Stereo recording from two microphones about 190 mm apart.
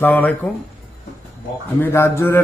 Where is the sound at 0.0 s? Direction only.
10° left (ahead or behind).